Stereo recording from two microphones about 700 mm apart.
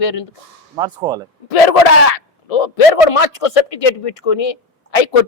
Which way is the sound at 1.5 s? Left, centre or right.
Left.